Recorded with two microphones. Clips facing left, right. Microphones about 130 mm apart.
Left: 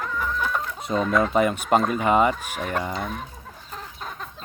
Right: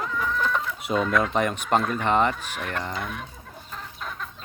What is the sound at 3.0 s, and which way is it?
Speech, 35° left (ahead or behind).